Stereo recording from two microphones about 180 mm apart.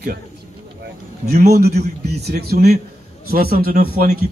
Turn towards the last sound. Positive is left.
turn(degrees=-55)  # may be behind; listen again after turning